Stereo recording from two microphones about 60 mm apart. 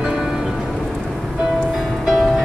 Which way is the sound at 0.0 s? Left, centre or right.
Centre.